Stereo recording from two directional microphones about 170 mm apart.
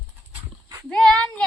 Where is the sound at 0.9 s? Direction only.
5° left (ahead or behind).